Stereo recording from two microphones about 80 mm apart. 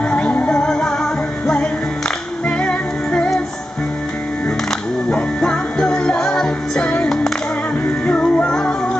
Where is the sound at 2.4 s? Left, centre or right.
Centre.